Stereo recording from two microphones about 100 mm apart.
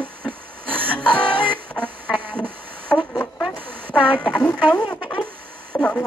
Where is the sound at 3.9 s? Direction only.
10° left (ahead or behind).